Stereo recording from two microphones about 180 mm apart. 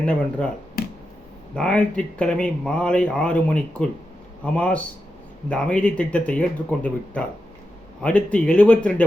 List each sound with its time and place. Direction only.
0.0 s speech: 5° left (ahead or behind)
1.5 s speech: 5° left (ahead or behind)